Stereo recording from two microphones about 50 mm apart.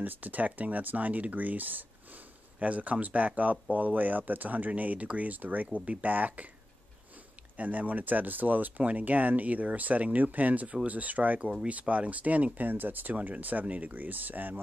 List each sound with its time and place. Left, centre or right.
0.0 s speech: right
7.5 s speech: right